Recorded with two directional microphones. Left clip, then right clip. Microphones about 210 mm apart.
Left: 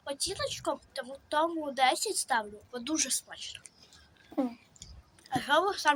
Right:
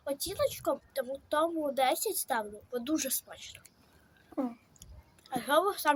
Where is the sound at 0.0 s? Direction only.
25° right (ahead or behind).